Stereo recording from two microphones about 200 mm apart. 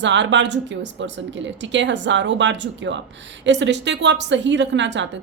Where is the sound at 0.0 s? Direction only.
65° right (ahead or behind).